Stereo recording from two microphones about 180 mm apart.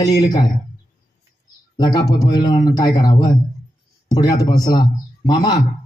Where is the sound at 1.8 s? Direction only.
20° left (ahead or behind).